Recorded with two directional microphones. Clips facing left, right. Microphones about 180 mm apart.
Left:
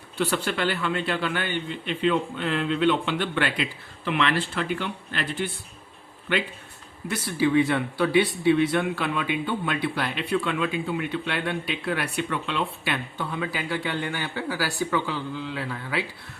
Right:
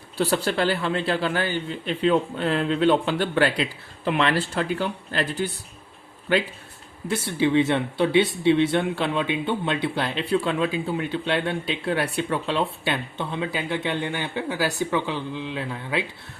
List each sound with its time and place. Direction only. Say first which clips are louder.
0.2 s a man's voice: right 3 dB; 35° right (ahead or behind)
7.3 s speech: right 1 dB; 25° right (ahead or behind)